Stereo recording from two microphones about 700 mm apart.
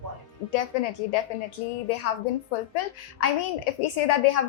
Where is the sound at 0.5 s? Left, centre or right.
Left.